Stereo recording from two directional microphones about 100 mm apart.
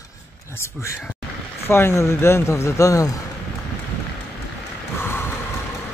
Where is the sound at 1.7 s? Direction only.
25° left (ahead or behind).